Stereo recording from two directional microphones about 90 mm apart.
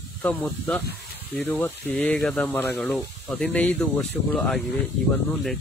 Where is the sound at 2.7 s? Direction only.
Centre (ahead or behind).